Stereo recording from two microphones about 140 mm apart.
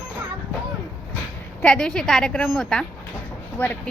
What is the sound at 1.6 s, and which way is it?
A woman's voice, 5° left (ahead or behind).